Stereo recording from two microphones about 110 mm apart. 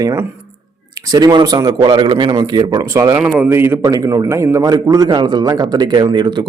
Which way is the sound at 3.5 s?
20° right (ahead or behind).